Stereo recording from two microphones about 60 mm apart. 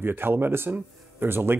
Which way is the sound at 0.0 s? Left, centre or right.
Right.